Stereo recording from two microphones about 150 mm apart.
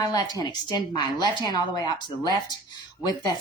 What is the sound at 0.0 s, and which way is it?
Speech, 25° left (ahead or behind).